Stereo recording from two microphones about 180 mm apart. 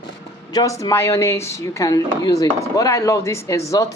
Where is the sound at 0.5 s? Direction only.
20° left (ahead or behind).